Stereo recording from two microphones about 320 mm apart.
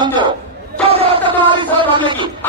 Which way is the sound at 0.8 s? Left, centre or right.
Centre.